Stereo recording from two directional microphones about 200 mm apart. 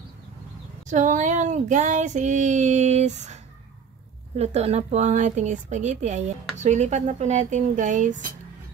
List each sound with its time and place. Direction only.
0.8 s female singing: 40° right (ahead or behind)
4.4 s female singing: 30° right (ahead or behind)